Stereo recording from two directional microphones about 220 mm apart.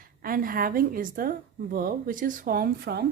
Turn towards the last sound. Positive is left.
turn(degrees=-45)  # may be behind; listen again after turning